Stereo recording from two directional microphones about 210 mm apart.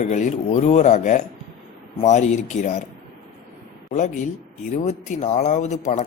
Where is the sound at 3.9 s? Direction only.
35° left (ahead or behind).